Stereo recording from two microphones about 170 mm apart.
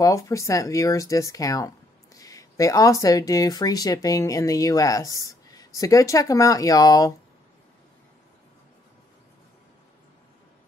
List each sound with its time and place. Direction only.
0.0 s speech: 20° left (ahead or behind)